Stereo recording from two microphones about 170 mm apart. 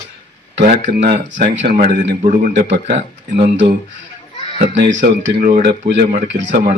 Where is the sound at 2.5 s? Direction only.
90° right.